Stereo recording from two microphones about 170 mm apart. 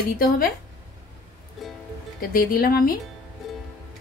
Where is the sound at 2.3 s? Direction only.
60° left (ahead or behind).